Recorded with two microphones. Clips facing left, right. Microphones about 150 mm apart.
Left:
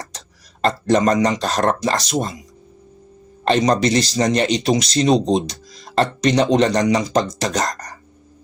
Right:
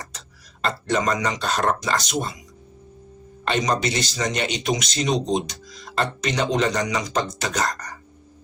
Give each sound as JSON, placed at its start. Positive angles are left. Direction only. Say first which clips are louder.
{"t": 0.9, "sound": "speech", "louder": "left 7 dB", "side_deg": 40}
{"t": 3.4, "sound": "speech", "louder": "left 6 dB", "side_deg": 35}